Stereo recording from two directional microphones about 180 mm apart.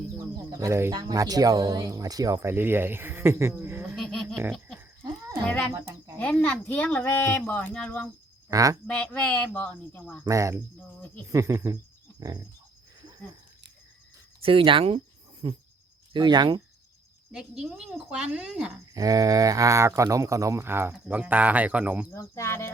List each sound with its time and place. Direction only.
0.6 s speech: 15° right (ahead or behind)
3.8 s a sound: centre (ahead or behind)
6.1 s speech: 5° left (ahead or behind)
8.4 s speech: 20° right (ahead or behind)
8.9 s speech: 5° left (ahead or behind)
10.2 s speech: 15° right (ahead or behind)
14.4 s speech: 30° right (ahead or behind)
17.3 s a woman's voice: 5° right (ahead or behind)
18.9 s speech: 20° right (ahead or behind)
22.1 s speech: 15° left (ahead or behind)